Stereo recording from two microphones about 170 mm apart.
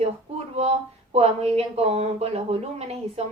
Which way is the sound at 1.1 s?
35° right (ahead or behind).